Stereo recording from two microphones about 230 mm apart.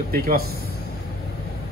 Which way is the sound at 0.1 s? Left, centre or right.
Right.